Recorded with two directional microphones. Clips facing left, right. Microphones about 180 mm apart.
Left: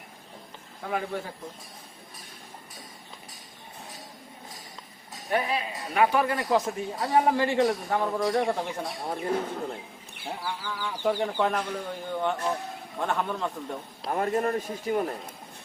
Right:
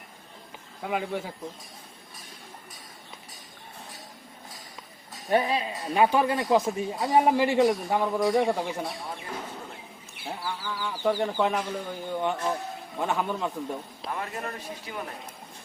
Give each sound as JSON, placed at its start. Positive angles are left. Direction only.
{"t": 0.9, "sound": "a man's voice", "side_deg": -10}
{"t": 5.3, "sound": "a man's voice", "side_deg": -25}
{"t": 10.2, "sound": "speech", "side_deg": -5}
{"t": 14.1, "sound": "speech", "side_deg": 45}